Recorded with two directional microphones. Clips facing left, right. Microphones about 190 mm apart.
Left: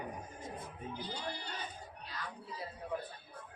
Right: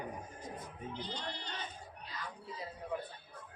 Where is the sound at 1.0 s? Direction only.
10° left (ahead or behind).